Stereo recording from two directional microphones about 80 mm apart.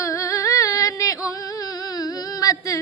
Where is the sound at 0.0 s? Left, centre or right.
Left.